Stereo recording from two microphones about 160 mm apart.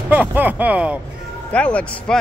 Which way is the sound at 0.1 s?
10° right (ahead or behind).